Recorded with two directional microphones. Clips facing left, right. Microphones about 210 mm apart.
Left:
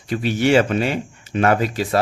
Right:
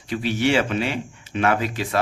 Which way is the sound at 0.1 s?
45° left (ahead or behind).